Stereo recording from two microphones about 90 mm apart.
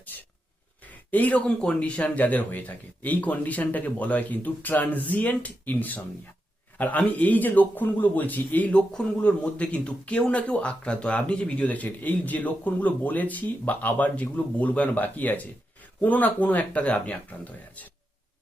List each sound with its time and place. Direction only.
0.8 s speech: 20° left (ahead or behind)